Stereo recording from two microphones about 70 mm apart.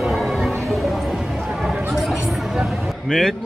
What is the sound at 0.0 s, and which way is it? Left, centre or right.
Music, centre.